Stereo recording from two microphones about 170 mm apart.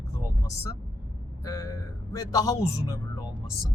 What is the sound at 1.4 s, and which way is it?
A man's voice, 20° left (ahead or behind).